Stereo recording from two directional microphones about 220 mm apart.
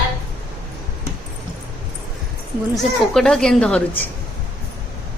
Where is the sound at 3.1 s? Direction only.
5° left (ahead or behind).